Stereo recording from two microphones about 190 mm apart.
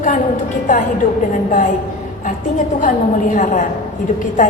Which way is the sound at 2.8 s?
40° left (ahead or behind).